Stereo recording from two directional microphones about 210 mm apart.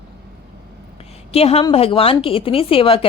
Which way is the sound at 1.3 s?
30° left (ahead or behind).